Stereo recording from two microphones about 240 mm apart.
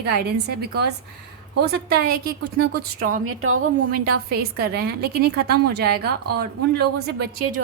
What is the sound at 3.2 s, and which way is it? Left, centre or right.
Speech, right.